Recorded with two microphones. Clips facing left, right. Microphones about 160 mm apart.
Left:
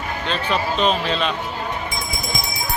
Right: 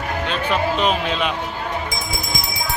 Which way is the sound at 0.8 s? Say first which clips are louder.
Even; 10° right (ahead or behind).